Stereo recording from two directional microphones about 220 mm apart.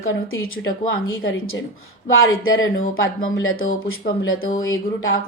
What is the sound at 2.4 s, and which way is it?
Speech, 65° left (ahead or behind).